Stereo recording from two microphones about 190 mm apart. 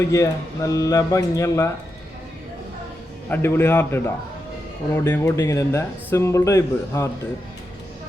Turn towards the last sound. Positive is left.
turn(degrees=15)  # may be behind; listen again after turning